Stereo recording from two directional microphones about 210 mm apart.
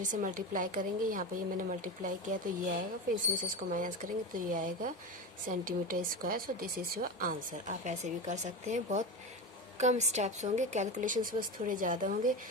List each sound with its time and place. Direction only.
0.0 s speech: 40° right (ahead or behind)